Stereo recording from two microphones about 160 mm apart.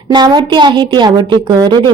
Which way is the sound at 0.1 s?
25° right (ahead or behind).